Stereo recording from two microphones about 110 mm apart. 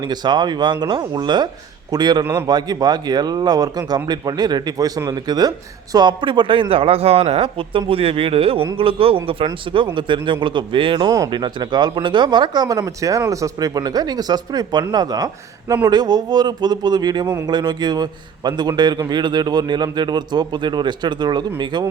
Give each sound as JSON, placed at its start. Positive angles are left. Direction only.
{"t": 0.0, "sound": "speech", "side_deg": -40}